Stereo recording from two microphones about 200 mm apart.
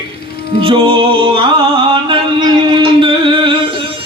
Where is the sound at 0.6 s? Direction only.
25° right (ahead or behind).